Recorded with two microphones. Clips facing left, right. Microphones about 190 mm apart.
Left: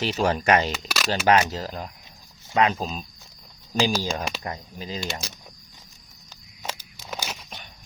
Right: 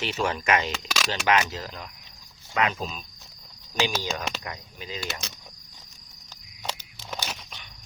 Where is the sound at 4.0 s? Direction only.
35° left (ahead or behind).